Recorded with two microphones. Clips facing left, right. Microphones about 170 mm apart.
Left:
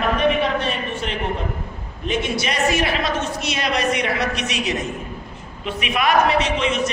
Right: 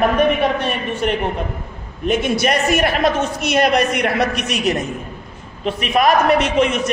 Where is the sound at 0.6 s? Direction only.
55° right (ahead or behind).